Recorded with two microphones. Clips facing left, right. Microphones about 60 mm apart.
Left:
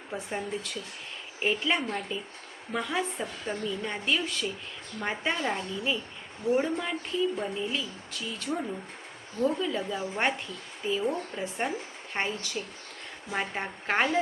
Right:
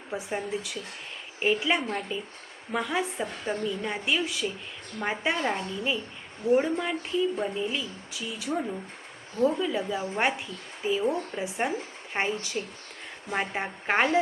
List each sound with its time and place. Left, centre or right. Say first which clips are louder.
0.1 s speech: right 2 dB; centre